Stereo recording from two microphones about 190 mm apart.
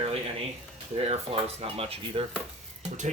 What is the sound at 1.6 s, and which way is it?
Speech, 30° right (ahead or behind).